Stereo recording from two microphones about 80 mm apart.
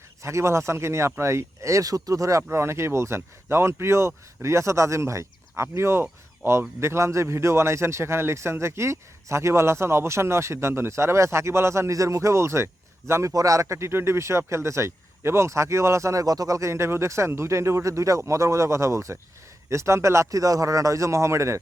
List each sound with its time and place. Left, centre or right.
0.2 s a man's voice: right